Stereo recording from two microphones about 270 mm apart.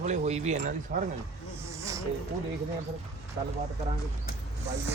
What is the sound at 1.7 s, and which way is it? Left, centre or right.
Snake, centre.